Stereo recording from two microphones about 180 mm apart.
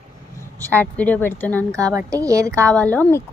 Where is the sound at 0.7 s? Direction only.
10° left (ahead or behind).